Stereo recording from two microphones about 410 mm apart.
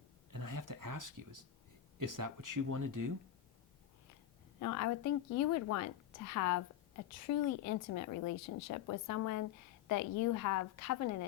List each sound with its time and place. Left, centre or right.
0.3 s speech: right
4.6 s a woman's voice: left